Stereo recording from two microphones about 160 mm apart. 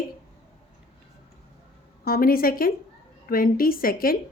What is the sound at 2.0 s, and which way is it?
A woman's voice, 65° left (ahead or behind).